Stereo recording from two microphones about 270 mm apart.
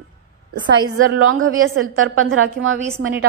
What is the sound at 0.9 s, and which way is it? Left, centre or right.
A woman's voice, right.